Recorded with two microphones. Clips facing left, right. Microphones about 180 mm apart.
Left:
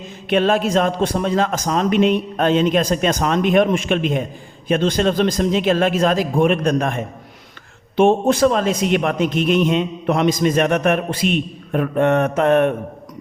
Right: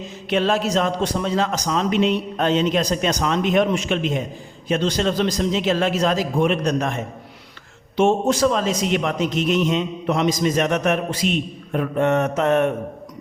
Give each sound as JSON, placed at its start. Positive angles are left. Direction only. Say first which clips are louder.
{"t": 0.3, "sound": "a man's voice", "louder": "left 3 dB", "side_deg": 55}